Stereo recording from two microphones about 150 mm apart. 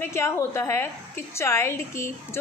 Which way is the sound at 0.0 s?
20° left (ahead or behind).